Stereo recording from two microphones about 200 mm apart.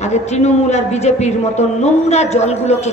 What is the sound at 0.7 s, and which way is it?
A woman's voice, 35° left (ahead or behind).